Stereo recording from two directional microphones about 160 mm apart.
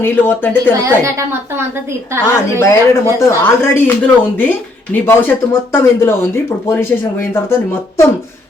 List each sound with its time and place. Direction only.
0.0 s speech: 10° left (ahead or behind)
0.8 s a woman's voice: 20° right (ahead or behind)
2.2 s speech: 15° left (ahead or behind)